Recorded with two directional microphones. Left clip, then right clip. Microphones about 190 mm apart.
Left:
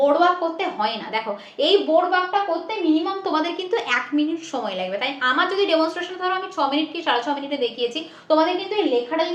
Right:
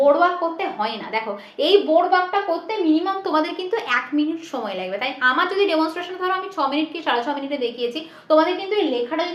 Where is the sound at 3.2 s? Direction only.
Centre (ahead or behind).